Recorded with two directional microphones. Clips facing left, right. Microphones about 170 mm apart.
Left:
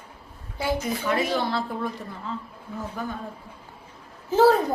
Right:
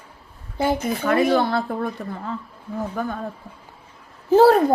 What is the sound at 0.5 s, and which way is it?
A woman's voice, 55° right (ahead or behind).